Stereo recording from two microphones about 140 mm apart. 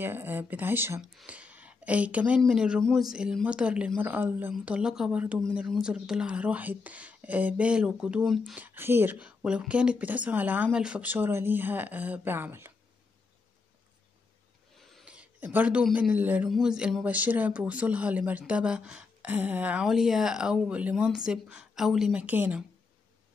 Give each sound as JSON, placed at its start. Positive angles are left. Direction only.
{"t": 0.0, "sound": "a woman's voice", "side_deg": -15}
{"t": 8.5, "sound": "speech", "side_deg": -15}
{"t": 14.8, "sound": "a sound", "side_deg": 0}
{"t": 15.8, "sound": "a woman's voice", "side_deg": -10}